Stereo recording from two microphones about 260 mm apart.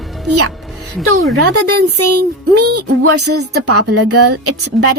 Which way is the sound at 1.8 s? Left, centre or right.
Right.